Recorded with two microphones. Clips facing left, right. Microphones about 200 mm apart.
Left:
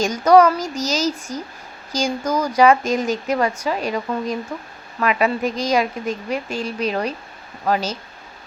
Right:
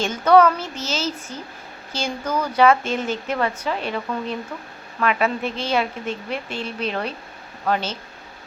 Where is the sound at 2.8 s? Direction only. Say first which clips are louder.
Left 4 dB; 40° left (ahead or behind).